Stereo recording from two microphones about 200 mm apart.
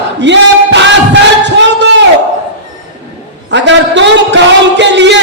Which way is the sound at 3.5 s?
60° right (ahead or behind).